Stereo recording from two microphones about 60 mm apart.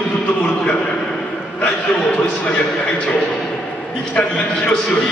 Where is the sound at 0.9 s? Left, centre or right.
Centre.